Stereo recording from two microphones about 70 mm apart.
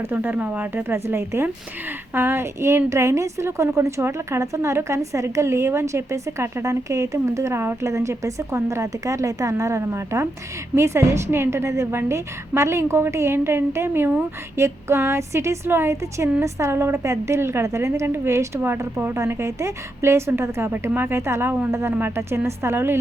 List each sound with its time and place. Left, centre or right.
0.0 s a woman's voice: right